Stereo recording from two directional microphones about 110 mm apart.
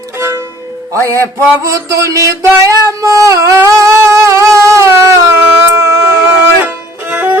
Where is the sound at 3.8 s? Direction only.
25° right (ahead or behind).